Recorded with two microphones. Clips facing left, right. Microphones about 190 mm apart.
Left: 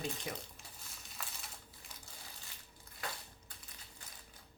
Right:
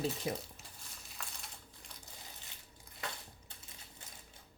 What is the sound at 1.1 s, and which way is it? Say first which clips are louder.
Crumpling: even; centre (ahead or behind).